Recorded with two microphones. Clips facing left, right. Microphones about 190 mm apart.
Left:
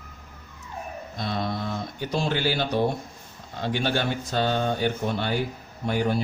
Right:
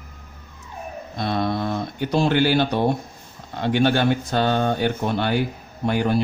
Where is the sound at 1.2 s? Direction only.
65° right (ahead or behind).